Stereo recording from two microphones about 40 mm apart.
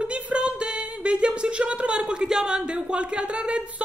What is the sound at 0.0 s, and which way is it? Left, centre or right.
Speech, right.